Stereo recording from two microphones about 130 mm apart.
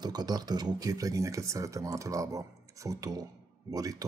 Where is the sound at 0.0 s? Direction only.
30° right (ahead or behind).